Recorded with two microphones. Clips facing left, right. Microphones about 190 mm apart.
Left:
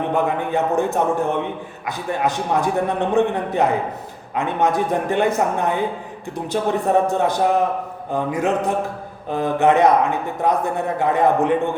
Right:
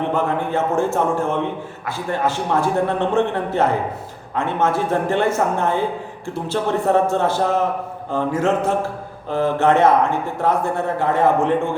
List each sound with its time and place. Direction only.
0.1 s speech: 15° left (ahead or behind)